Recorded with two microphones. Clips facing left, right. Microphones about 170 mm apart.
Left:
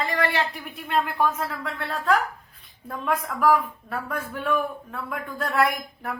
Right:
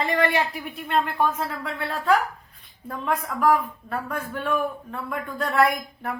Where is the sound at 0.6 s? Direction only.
Centre (ahead or behind).